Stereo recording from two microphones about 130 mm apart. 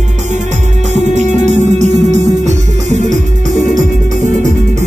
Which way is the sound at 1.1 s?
65° right (ahead or behind).